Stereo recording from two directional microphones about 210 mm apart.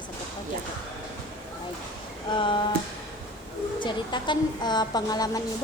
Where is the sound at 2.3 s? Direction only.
25° left (ahead or behind).